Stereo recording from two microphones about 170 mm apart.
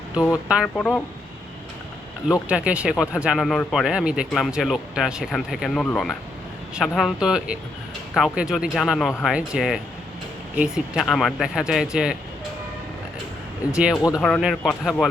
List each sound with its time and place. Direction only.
0.4 s speech: 5° right (ahead or behind)
0.8 s speech: 5° left (ahead or behind)
2.5 s speech: 5° right (ahead or behind)
13.9 s speech: 20° left (ahead or behind)
14.2 s speech: 5° left (ahead or behind)